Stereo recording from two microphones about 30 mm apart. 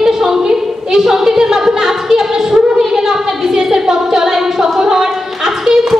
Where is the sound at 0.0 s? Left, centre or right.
Centre.